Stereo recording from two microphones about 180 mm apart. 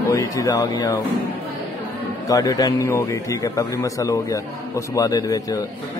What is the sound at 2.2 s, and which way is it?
A man's voice, 20° left (ahead or behind).